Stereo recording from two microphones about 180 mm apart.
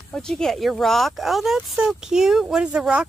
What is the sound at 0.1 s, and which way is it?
Speech, 5° left (ahead or behind).